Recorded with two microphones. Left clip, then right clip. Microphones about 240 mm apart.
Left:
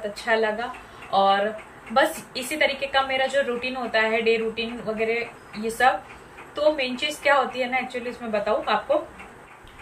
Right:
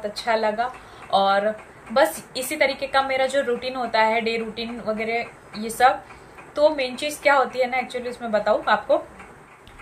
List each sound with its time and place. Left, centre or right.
0.1 s a woman's voice: centre